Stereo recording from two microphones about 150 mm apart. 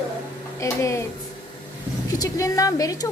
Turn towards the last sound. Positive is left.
turn(degrees=25)  # may be behind; listen again after turning